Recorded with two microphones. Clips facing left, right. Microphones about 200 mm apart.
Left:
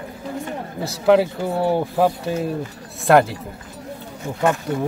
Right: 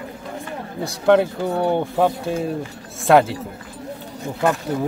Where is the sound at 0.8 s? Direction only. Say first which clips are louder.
Even; 5° left (ahead or behind).